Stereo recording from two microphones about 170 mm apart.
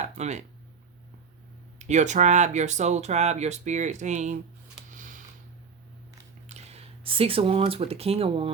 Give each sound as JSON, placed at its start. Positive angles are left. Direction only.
{"t": 0.0, "sound": "speech", "side_deg": -45}
{"t": 1.8, "sound": "speech", "side_deg": -45}
{"t": 4.9, "sound": "a sound", "side_deg": -50}
{"t": 6.5, "sound": "speech", "side_deg": -40}